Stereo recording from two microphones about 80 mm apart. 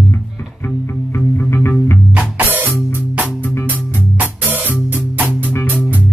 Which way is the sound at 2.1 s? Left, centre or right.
Centre.